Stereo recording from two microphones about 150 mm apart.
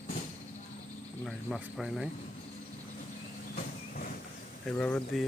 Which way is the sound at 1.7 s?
Centre (ahead or behind).